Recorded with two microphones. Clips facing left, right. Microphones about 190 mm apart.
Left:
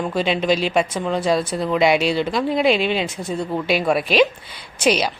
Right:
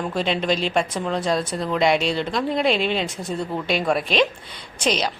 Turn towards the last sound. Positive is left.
turn(degrees=10)  # may be behind; listen again after turning